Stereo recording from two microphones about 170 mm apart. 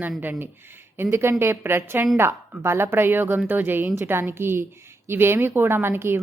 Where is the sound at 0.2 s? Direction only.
10° right (ahead or behind).